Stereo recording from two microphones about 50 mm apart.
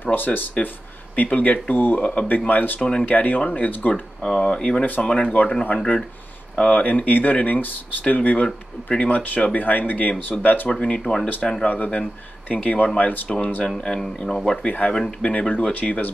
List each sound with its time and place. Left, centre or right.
0.0 s speech: left
2.0 s speech: centre
2.2 s speech: left
4.2 s speech: centre
5.8 s speech: centre
6.7 s speech: left
8.5 s speech: centre
9.0 s speech: left
10.7 s speech: left
14.7 s speech: left
15.0 s speech: centre; by 16.1 s left